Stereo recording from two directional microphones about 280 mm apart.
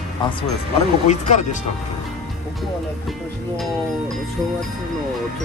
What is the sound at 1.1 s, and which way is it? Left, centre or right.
Speech, left.